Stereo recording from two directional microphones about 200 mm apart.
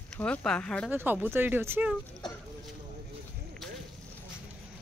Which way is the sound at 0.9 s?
10° right (ahead or behind).